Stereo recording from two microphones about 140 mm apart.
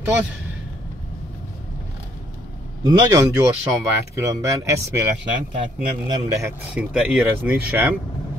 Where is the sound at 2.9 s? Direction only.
25° right (ahead or behind).